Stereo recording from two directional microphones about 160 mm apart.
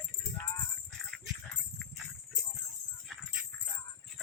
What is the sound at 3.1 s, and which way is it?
Jingle bell, 5° left (ahead or behind).